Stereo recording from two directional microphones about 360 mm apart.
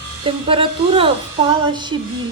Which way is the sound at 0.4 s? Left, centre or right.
Centre.